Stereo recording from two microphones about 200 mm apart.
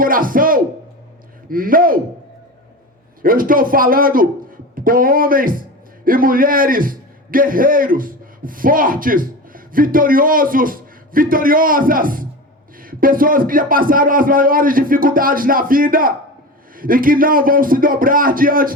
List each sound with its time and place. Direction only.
0.0 s speech: 45° right (ahead or behind)
3.2 s a man's voice: 45° right (ahead or behind)